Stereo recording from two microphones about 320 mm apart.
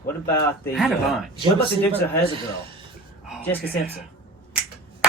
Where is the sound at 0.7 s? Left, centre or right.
Centre.